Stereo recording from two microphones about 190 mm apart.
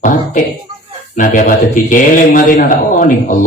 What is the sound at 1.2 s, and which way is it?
A man's voice, 45° left (ahead or behind).